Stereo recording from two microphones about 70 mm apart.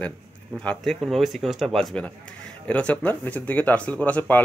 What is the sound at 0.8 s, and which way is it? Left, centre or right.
Speech, centre.